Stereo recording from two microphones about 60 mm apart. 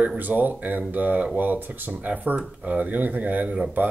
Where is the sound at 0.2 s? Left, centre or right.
Right.